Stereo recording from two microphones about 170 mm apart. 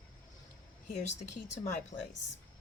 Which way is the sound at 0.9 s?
45° left (ahead or behind).